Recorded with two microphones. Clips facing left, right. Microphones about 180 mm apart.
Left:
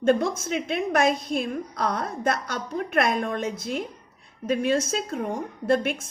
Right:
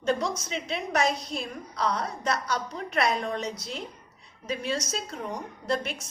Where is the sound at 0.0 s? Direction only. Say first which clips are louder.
Left 6 dB; 55° left (ahead or behind).